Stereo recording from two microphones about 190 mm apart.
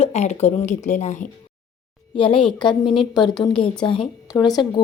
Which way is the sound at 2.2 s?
25° left (ahead or behind).